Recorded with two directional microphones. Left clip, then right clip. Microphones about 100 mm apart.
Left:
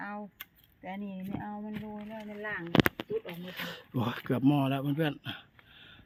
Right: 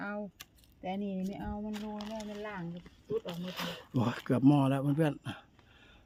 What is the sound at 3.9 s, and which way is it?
Speech, centre (ahead or behind).